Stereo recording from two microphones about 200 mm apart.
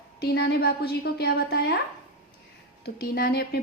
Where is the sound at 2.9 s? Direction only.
50° left (ahead or behind).